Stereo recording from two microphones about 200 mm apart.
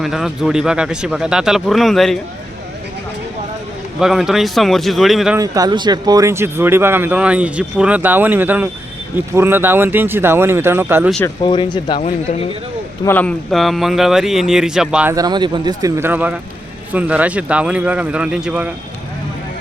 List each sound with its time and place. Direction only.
0.0 s speech: centre (ahead or behind)
4.0 s speech: centre (ahead or behind)
5.4 s a man's voice: 20° right (ahead or behind)
11.4 s speech: 25° left (ahead or behind)
11.9 s speech: 35° left (ahead or behind)
13.1 s speech: 5° left (ahead or behind)
15.1 s a man's voice: 20° right (ahead or behind)